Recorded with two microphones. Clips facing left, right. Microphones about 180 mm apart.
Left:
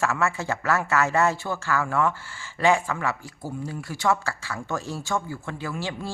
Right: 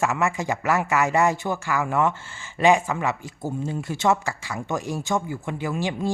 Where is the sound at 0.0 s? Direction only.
15° right (ahead or behind).